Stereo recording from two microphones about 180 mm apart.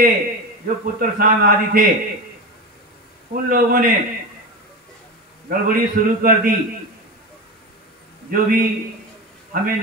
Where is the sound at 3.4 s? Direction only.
50° right (ahead or behind).